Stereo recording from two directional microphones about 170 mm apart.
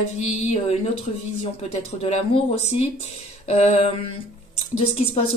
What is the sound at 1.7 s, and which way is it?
Speech, 40° left (ahead or behind).